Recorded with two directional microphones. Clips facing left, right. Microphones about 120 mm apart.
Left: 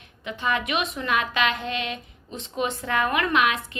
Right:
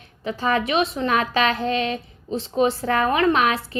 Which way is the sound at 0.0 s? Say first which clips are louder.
Right 4 dB; 35° right (ahead or behind).